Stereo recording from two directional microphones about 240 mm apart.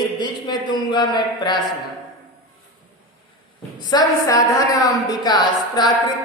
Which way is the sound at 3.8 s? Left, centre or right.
Centre.